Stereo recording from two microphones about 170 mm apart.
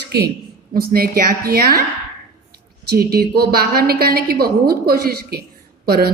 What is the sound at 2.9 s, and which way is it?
A woman's voice, 65° right (ahead or behind).